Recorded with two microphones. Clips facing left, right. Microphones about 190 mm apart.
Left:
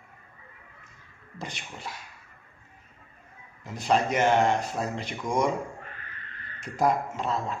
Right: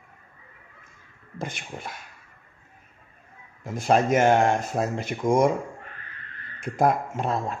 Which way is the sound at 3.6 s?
50° right (ahead or behind).